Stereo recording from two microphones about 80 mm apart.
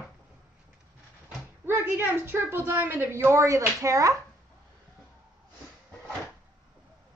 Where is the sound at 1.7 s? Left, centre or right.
Right.